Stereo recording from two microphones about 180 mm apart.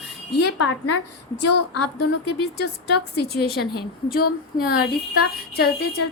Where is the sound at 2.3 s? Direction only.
65° left (ahead or behind).